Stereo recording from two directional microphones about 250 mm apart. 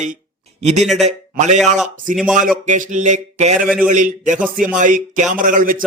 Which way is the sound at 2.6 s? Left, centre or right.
Right.